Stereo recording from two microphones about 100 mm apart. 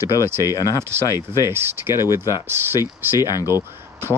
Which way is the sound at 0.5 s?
35° left (ahead or behind).